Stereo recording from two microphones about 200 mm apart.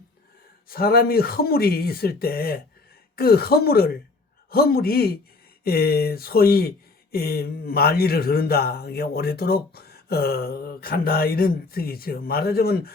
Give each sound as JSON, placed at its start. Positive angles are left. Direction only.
{"t": 0.7, "sound": "speech", "side_deg": 50}